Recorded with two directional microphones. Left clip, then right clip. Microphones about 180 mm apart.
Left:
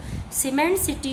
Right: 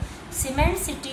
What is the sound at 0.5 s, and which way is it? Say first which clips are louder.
Speech: left 3 dB; 50° left (ahead or behind).